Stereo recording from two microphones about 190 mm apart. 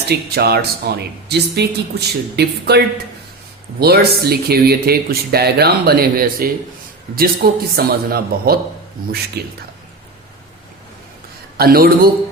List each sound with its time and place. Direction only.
0.1 s a man's voice: 55° right (ahead or behind)
11.5 s a man's voice: 55° right (ahead or behind)